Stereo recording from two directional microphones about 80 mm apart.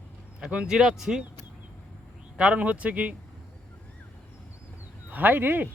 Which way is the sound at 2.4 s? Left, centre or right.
Centre.